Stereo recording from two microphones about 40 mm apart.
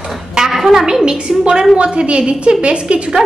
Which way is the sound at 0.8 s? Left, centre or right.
Centre.